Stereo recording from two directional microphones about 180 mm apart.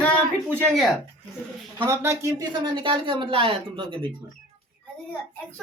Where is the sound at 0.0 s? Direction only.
5° left (ahead or behind).